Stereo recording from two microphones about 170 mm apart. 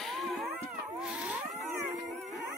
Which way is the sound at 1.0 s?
5° right (ahead or behind).